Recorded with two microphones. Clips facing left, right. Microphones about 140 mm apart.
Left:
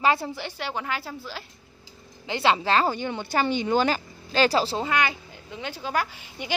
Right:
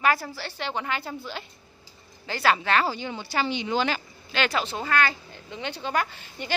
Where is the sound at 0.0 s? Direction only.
25° left (ahead or behind).